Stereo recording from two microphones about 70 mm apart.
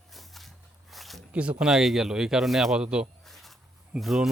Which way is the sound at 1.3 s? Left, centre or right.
Centre.